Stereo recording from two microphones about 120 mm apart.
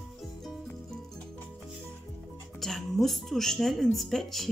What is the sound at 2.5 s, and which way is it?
Music, centre (ahead or behind).